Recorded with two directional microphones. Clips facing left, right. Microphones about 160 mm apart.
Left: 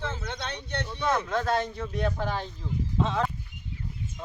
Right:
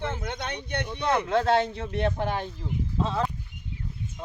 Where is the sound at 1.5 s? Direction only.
65° right (ahead or behind).